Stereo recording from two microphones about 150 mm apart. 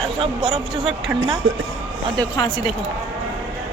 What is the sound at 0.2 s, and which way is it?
Speech, 35° right (ahead or behind).